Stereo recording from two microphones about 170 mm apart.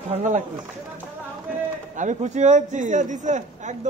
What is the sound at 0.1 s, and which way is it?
Speech, 45° right (ahead or behind).